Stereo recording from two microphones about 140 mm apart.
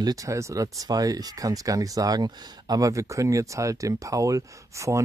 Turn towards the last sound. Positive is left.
turn(degrees=-20)  # may be behind; listen again after turning